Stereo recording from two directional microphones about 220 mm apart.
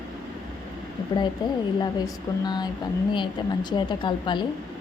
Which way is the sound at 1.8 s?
20° left (ahead or behind).